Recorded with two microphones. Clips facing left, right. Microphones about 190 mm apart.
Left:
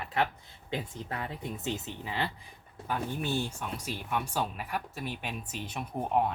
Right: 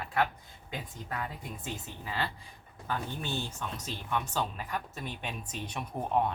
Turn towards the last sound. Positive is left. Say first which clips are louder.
# left 1 dB
turn(degrees=5)  # may be behind; listen again after turning